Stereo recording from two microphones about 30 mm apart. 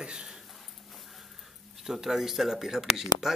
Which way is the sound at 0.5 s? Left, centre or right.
Centre.